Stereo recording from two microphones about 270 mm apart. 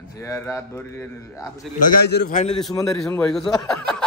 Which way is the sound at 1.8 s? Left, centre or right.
Left.